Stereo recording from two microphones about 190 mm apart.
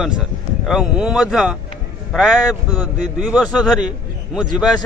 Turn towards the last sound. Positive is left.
turn(degrees=-5)  # may be behind; listen again after turning